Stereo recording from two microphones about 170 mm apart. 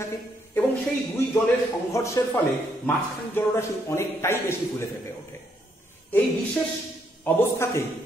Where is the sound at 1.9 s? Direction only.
15° left (ahead or behind).